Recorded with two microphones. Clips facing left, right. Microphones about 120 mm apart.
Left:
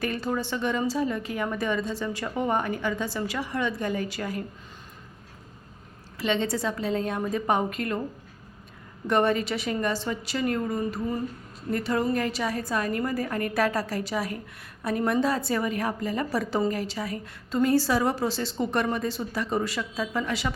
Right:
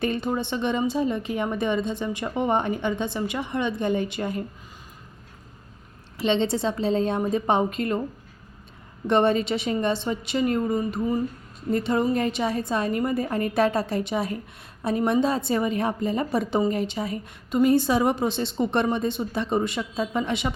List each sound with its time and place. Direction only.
0.0 s a woman's voice: 20° right (ahead or behind)
6.1 s a woman's voice: 25° right (ahead or behind)
9.0 s a woman's voice: 25° right (ahead or behind)